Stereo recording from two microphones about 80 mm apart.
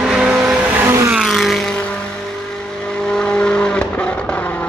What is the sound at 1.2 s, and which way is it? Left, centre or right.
Vehicle, centre.